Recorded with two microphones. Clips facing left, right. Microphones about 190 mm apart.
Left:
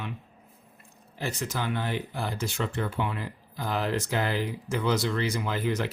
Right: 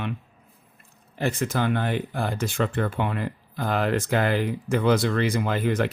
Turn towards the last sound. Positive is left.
turn(degrees=-55)  # may be behind; listen again after turning